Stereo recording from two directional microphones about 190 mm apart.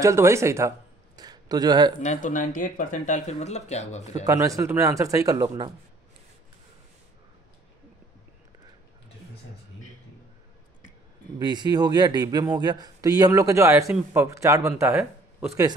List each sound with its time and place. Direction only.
0.0 s speech: 15° right (ahead or behind)
2.0 s speech: 40° left (ahead or behind)
4.0 s speech: 20° right (ahead or behind)
11.3 s speech: 20° right (ahead or behind)